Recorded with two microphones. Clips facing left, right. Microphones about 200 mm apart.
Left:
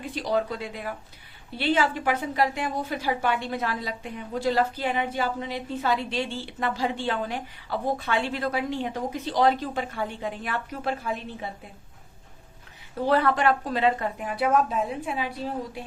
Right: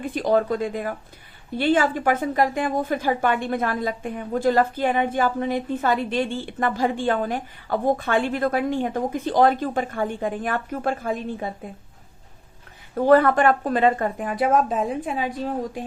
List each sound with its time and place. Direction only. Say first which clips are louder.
0.0 s a woman's voice: right 6 dB; 50° right (ahead or behind)
13.0 s a woman's voice: right 6 dB; 50° right (ahead or behind)